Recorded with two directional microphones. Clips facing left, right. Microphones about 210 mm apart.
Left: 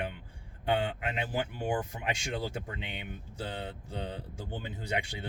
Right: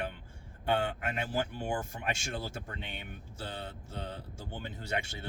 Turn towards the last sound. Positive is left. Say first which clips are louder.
# left 2 dB
turn(degrees=15)  # may be behind; listen again after turning